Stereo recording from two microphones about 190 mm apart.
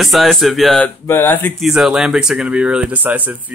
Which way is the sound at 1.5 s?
5° right (ahead or behind).